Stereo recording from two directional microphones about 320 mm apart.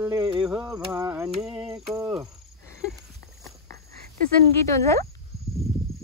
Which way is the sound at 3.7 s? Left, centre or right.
Right.